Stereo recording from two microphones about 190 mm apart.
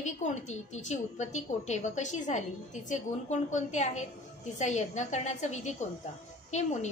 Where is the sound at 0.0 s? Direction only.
40° left (ahead or behind).